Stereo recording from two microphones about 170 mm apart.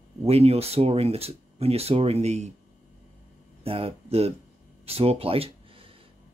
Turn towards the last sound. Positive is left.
turn(degrees=-35)  # may be behind; listen again after turning